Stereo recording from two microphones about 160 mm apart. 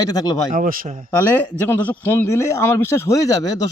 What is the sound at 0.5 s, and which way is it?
Speech, 55° right (ahead or behind).